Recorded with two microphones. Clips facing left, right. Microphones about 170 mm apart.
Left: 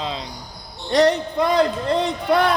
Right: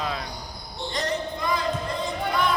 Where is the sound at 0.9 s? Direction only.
75° left (ahead or behind).